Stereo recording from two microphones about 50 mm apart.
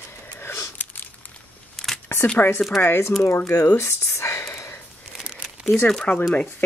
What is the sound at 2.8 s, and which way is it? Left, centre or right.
Speech, left.